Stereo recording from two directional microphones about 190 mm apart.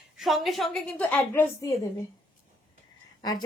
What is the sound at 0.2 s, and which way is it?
A woman's voice, centre (ahead or behind).